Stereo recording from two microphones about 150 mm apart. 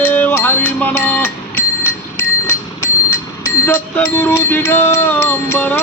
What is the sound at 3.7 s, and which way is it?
Music, 15° left (ahead or behind).